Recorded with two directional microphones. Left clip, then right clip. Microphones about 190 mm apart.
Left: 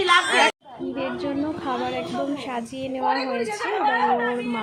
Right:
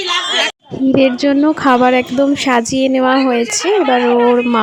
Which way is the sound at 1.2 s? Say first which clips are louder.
Right 15 dB; 55° right (ahead or behind).